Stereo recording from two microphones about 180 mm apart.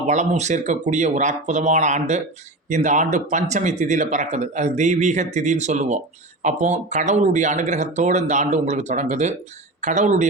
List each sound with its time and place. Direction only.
0.1 s speech: 40° right (ahead or behind)